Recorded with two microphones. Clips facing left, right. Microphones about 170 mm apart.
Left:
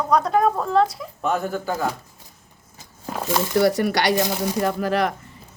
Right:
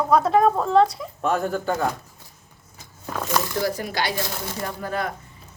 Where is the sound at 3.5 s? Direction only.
75° left (ahead or behind).